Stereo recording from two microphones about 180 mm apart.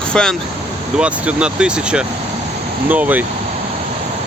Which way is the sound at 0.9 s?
5° right (ahead or behind).